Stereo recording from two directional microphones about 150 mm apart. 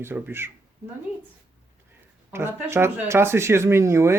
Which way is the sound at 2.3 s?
15° right (ahead or behind).